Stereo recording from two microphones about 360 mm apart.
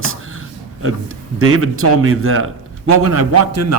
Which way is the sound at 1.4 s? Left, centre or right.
Right.